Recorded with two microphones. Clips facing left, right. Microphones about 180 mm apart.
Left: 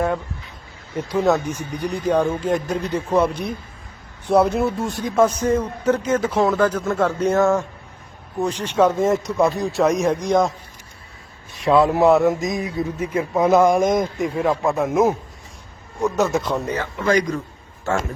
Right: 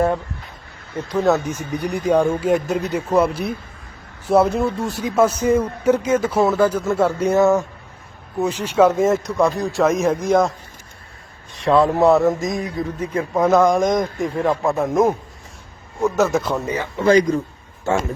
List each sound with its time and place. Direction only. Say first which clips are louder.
0.9 s speech: even; 10° left (ahead or behind)
1.8 s speech: right 2 dB; 10° right (ahead or behind)
11.5 s speech: even; centre (ahead or behind)
17.0 s a man's voice: right 5 dB; 30° right (ahead or behind)